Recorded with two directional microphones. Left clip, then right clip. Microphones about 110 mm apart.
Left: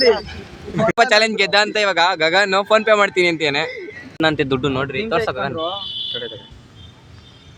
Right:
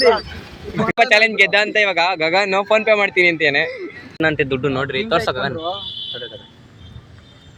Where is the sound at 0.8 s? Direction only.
40° left (ahead or behind).